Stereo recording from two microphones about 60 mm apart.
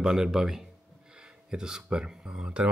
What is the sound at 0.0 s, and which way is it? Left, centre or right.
A man's voice, centre.